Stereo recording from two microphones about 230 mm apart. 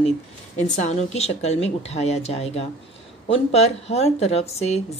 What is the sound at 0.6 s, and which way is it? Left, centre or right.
A woman's voice, left.